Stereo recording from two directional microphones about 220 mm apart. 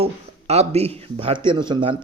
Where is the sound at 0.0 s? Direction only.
30° right (ahead or behind).